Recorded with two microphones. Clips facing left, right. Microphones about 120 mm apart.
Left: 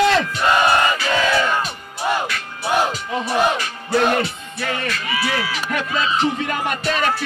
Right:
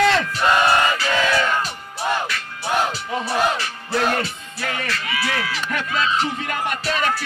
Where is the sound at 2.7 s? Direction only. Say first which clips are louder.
Left 2 dB; 10° left (ahead or behind).